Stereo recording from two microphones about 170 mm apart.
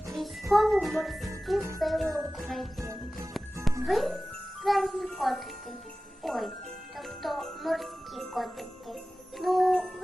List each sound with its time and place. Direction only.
0.5 s jingle bell: centre (ahead or behind)
2.8 s jingle bell: 20° right (ahead or behind)
3.3 s music: centre (ahead or behind)
3.8 s jingle bell: centre (ahead or behind)
6.2 s speech: centre (ahead or behind)
7.2 s jingle bell: centre (ahead or behind)